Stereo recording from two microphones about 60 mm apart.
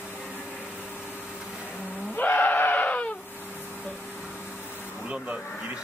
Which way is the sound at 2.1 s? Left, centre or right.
Left.